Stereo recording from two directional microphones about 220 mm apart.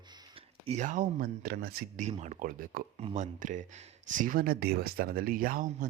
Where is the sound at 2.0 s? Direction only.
30° right (ahead or behind).